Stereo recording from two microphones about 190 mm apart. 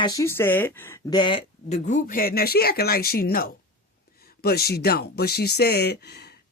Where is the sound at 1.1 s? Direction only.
25° left (ahead or behind).